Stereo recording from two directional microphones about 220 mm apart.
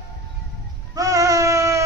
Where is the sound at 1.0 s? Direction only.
15° right (ahead or behind).